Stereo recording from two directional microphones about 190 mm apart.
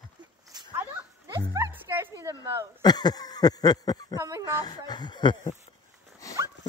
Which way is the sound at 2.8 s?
20° left (ahead or behind).